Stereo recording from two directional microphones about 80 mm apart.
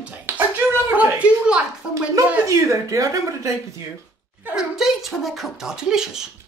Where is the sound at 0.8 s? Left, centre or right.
Centre.